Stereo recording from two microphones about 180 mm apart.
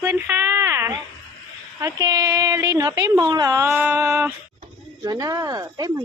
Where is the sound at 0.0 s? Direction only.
10° right (ahead or behind).